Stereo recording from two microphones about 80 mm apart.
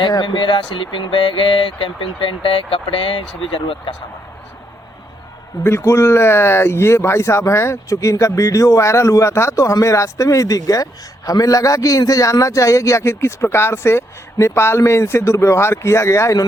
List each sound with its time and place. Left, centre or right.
0.1 s speech: left
5.6 s a man's voice: left